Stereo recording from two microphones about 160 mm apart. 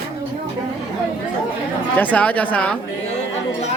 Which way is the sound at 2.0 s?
10° left (ahead or behind).